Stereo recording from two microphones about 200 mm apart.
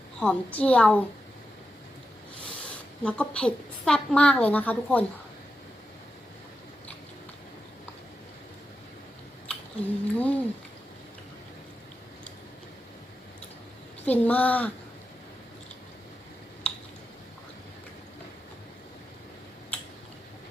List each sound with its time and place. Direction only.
0.2 s a woman's voice: 5° left (ahead or behind)
2.5 s a woman's voice: 5° left (ahead or behind)
9.5 s a sound: 5° left (ahead or behind)
14.0 s a woman's voice: 5° left (ahead or behind)